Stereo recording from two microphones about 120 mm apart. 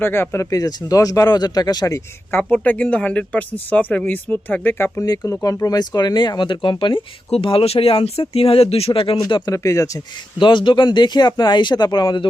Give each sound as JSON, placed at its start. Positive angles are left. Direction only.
{"t": 0.0, "sound": "speech", "side_deg": 20}
{"t": 2.4, "sound": "speech", "side_deg": 10}
{"t": 5.0, "sound": "speech", "side_deg": 30}
{"t": 9.5, "sound": "speech", "side_deg": 25}
{"t": 10.4, "sound": "speech", "side_deg": 40}